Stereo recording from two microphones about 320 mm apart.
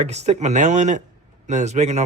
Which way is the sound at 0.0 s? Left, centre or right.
Right.